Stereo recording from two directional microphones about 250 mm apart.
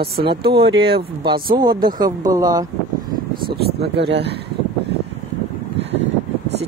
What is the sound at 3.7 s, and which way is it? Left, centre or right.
Speech, right.